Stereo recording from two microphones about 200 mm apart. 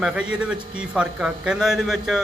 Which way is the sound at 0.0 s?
5° right (ahead or behind).